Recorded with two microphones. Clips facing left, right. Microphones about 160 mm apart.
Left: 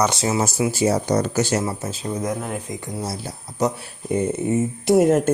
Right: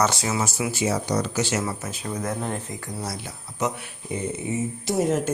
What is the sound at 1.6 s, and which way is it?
Speech, 25° left (ahead or behind).